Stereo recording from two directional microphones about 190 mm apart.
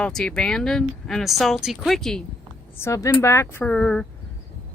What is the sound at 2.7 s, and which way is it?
Speech, 15° left (ahead or behind).